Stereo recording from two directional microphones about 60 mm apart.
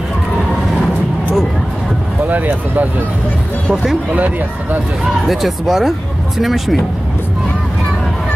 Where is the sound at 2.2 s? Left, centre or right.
Right.